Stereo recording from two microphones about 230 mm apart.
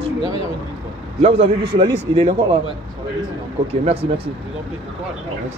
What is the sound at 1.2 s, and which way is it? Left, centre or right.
A man's voice, right.